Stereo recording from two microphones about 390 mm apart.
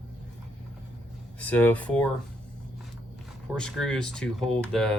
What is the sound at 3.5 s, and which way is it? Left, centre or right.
Speech, centre.